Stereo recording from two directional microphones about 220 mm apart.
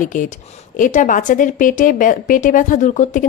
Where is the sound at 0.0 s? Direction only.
35° left (ahead or behind).